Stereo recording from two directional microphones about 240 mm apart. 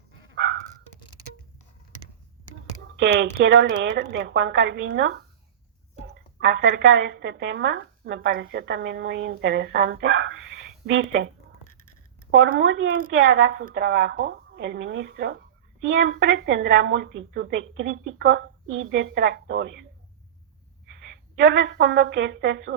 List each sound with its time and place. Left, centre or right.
2.9 s a woman's voice: right
6.4 s a woman's voice: right
12.3 s a woman's voice: right
20.8 s a woman's voice: right